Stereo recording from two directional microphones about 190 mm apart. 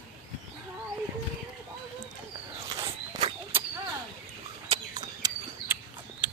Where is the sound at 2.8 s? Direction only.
15° right (ahead or behind).